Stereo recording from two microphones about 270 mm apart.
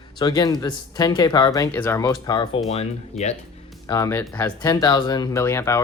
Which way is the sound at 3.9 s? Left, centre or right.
Centre.